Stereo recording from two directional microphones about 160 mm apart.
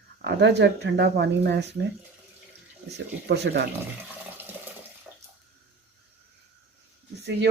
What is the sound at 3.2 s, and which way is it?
Speech, 90° right.